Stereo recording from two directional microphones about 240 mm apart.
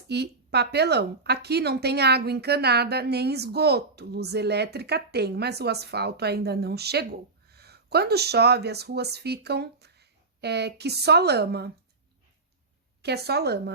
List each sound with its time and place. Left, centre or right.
0.1 s a woman's voice: right
13.0 s a woman's voice: right